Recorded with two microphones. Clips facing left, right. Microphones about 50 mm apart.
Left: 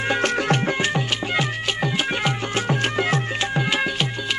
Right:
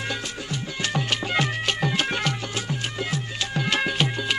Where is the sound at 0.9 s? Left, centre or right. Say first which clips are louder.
Left 1 dB; centre.